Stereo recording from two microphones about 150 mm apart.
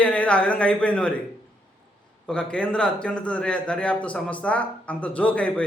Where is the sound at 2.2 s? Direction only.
5° left (ahead or behind).